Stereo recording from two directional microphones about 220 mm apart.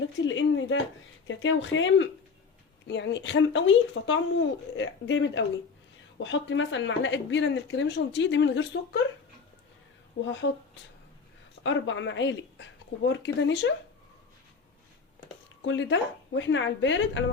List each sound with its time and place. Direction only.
0.2 s speech: 60° left (ahead or behind)
10.4 s speech: 60° left (ahead or behind)
11.6 s speech: 55° left (ahead or behind)
15.6 s speech: 55° left (ahead or behind)